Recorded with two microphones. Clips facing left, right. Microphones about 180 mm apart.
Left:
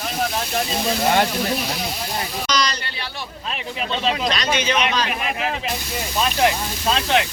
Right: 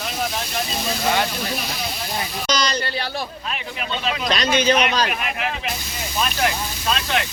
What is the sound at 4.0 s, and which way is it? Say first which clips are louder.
Speech: even; 30° left (ahead or behind).